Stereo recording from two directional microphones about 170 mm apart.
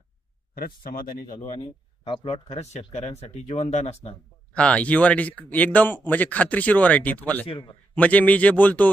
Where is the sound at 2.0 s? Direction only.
35° left (ahead or behind).